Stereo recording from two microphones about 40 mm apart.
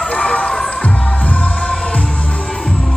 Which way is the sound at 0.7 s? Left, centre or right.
Left.